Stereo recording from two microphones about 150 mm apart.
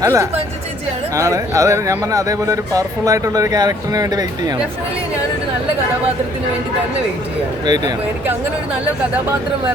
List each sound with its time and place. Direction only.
0.0 s speech: 20° right (ahead or behind)
7.6 s speech: 25° right (ahead or behind)